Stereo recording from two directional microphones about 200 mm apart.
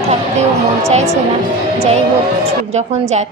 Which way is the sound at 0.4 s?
35° right (ahead or behind).